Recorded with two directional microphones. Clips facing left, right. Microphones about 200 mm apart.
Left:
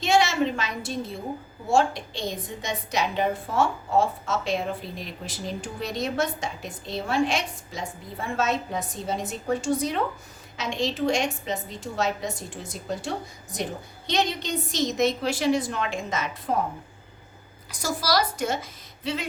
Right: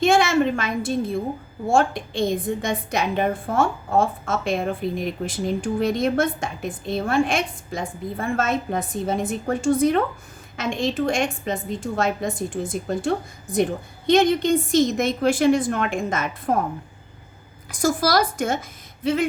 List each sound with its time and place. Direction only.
0.0 s a sound: 55° right (ahead or behind)
1.6 s a woman's voice: 50° right (ahead or behind)
17.7 s a woman's voice: 50° right (ahead or behind)